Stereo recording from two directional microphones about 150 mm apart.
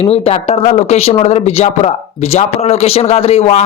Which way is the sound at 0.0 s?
45° left (ahead or behind).